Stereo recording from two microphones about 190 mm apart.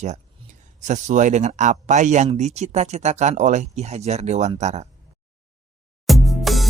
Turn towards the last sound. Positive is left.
turn(degrees=0)  # may be behind; listen again after turning